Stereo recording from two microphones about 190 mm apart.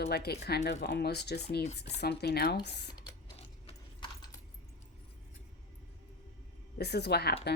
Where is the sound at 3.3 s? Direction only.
30° left (ahead or behind).